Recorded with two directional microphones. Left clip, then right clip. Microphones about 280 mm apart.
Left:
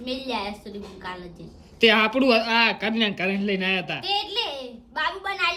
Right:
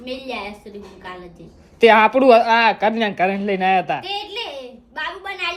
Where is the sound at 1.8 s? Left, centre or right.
Centre.